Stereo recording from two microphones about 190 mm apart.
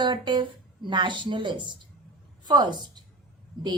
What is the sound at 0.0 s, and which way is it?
A woman's voice, 25° right (ahead or behind).